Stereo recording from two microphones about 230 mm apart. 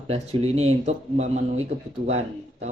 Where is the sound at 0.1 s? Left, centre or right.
Right.